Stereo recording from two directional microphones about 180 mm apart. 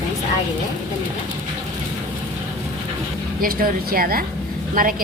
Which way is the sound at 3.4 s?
50° right (ahead or behind).